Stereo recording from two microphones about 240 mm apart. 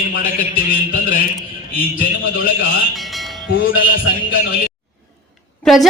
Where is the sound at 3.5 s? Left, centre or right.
Left.